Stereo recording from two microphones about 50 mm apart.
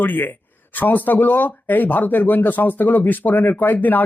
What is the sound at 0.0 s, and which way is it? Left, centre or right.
Speech, left.